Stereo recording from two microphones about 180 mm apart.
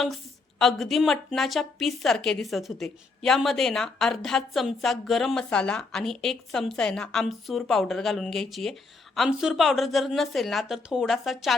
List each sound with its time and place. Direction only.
0.6 s a woman's voice: centre (ahead or behind)